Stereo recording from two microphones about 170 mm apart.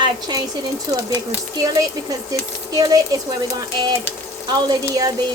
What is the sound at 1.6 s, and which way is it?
Speech, 20° right (ahead or behind).